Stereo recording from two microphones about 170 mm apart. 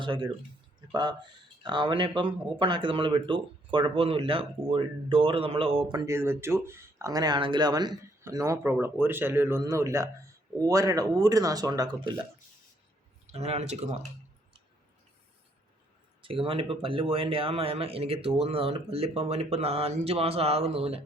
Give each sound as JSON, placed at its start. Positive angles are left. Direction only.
{"t": 0.0, "sound": "speech", "side_deg": -30}
{"t": 1.6, "sound": "speech", "side_deg": -30}
{"t": 13.2, "sound": "speech", "side_deg": -40}
{"t": 16.2, "sound": "speech", "side_deg": -30}